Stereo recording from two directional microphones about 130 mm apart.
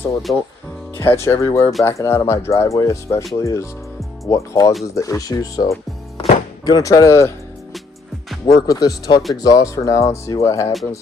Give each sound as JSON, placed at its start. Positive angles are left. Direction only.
{"t": 0.9, "sound": "speech", "side_deg": 15}
{"t": 6.1, "sound": "music", "side_deg": 60}
{"t": 6.7, "sound": "speech", "side_deg": 25}
{"t": 8.4, "sound": "speech", "side_deg": 25}